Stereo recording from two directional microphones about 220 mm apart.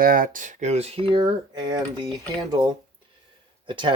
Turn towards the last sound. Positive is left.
turn(degrees=-20)  # may be behind; listen again after turning